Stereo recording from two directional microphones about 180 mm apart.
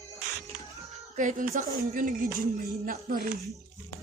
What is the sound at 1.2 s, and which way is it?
Speech, 45° right (ahead or behind).